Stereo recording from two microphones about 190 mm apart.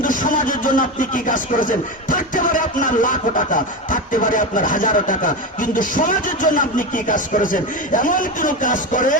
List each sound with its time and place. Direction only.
0.0 s speech: 45° left (ahead or behind)